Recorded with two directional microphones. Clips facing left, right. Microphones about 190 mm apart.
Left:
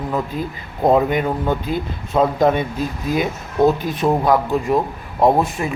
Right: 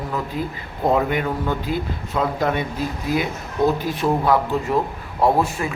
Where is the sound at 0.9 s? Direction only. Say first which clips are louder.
Left 4 dB; 20° left (ahead or behind).